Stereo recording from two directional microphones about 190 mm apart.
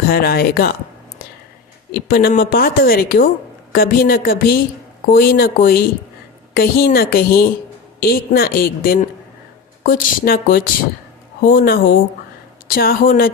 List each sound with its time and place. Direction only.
0.1 s a woman's voice: 55° left (ahead or behind)
1.9 s a woman's voice: 55° left (ahead or behind)